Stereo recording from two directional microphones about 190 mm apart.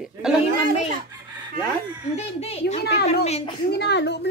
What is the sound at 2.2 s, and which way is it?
A child's voice, 35° left (ahead or behind).